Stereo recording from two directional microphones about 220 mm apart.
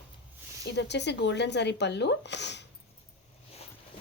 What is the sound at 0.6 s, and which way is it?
A woman's voice, 50° left (ahead or behind).